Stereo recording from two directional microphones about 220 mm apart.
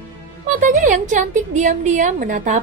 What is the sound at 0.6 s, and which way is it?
A woman's voice, 35° right (ahead or behind).